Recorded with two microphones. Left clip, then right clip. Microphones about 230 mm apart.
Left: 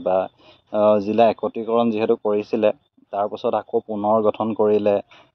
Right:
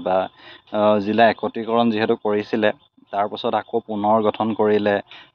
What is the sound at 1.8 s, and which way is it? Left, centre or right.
Speech, centre.